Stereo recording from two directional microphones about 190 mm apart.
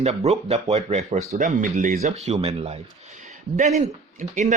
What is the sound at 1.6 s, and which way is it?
Speech, 45° right (ahead or behind).